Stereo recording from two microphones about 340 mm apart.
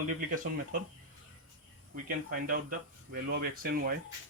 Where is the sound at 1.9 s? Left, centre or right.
Right.